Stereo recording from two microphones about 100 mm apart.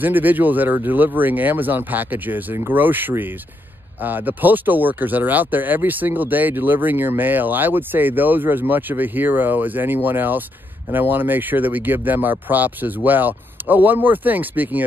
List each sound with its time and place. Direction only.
0.0 s speech: 20° right (ahead or behind)